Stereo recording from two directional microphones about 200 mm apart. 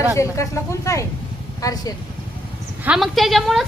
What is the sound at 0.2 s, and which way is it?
Speech, 15° left (ahead or behind).